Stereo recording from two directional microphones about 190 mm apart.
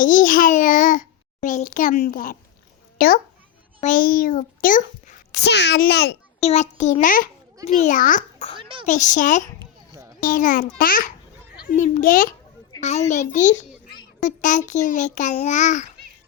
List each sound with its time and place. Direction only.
0.0 s a child's voice: 45° left (ahead or behind)
5.3 s a child's voice: 65° left (ahead or behind)
6.4 s a child's voice: 35° left (ahead or behind)
9.6 s a sound: 20° right (ahead or behind)
10.2 s a child's voice: 45° left (ahead or behind)